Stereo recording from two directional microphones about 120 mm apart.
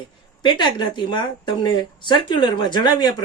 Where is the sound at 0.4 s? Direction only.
40° left (ahead or behind).